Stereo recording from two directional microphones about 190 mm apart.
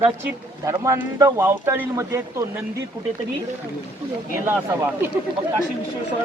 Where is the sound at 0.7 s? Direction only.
15° right (ahead or behind).